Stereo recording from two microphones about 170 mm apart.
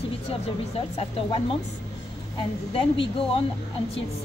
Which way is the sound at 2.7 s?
30° left (ahead or behind).